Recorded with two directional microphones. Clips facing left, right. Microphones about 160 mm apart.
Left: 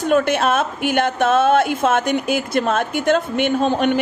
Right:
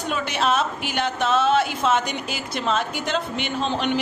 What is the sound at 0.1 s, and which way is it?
A woman's voice, 50° left (ahead or behind).